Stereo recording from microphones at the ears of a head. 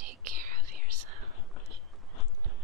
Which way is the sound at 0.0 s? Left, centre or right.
Right.